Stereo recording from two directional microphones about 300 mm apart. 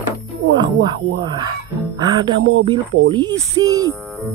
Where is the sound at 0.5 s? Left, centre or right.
Centre.